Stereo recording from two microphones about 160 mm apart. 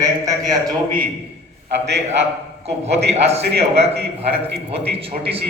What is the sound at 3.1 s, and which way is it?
Speech, 40° right (ahead or behind).